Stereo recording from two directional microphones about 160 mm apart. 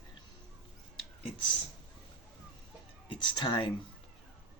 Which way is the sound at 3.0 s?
30° left (ahead or behind).